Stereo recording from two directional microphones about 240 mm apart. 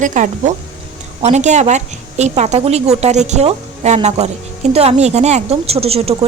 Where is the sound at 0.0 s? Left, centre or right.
Right.